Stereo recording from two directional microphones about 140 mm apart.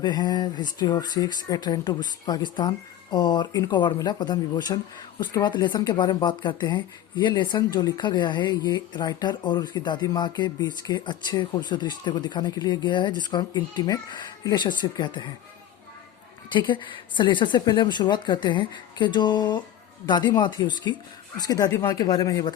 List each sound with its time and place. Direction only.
0.0 s speech: 30° left (ahead or behind)
16.5 s speech: 35° left (ahead or behind)